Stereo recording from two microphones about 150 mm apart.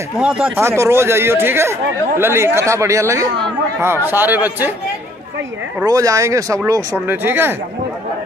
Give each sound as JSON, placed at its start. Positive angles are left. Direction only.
{"t": 0.2, "sound": "speech", "side_deg": -10}
{"t": 5.9, "sound": "speech", "side_deg": -20}